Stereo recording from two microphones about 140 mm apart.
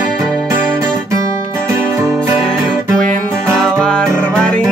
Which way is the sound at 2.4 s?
5° left (ahead or behind).